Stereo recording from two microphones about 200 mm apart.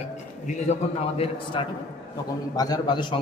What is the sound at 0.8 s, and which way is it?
A man's voice, 35° left (ahead or behind).